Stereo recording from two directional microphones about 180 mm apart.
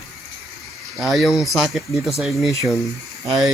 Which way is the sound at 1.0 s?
Centre (ahead or behind).